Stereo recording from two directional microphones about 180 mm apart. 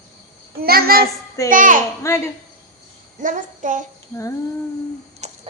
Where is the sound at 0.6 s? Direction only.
55° right (ahead or behind).